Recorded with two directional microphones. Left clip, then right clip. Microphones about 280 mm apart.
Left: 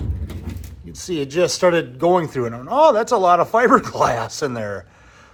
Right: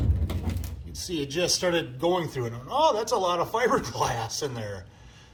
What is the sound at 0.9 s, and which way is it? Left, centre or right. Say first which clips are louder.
A man's voice: left 8 dB; centre.